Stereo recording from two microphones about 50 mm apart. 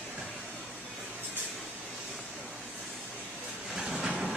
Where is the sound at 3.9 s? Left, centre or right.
Centre.